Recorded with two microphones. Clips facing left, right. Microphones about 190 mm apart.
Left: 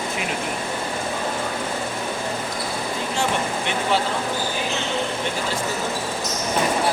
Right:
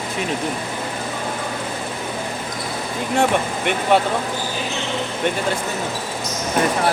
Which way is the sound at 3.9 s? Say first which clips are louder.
Right 6 dB; 60° right (ahead or behind).